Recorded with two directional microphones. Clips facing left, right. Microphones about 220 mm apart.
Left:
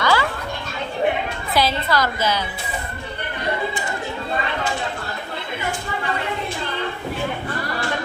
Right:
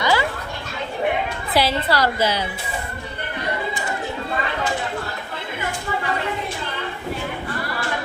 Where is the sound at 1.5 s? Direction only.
30° right (ahead or behind).